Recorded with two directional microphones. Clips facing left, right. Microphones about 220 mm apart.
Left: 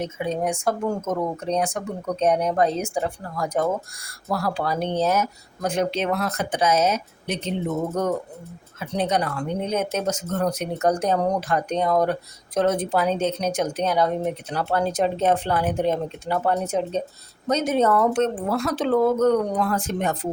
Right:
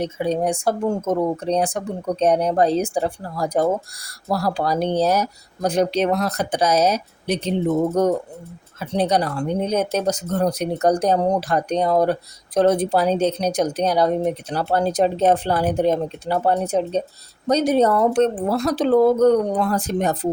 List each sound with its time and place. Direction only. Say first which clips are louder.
0.0 s speech: right 4 dB; 35° right (ahead or behind)